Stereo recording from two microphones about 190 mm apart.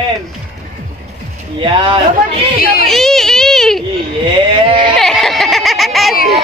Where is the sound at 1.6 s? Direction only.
25° right (ahead or behind).